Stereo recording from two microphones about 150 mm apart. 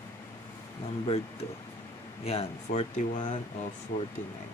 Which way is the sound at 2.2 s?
45° left (ahead or behind).